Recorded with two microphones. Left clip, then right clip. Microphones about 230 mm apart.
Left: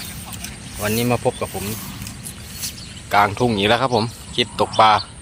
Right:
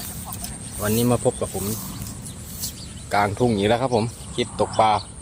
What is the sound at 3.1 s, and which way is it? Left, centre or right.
Speech, centre.